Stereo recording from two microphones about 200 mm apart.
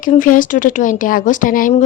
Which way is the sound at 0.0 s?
40° left (ahead or behind).